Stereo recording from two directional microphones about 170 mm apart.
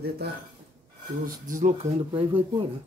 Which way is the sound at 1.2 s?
50° right (ahead or behind).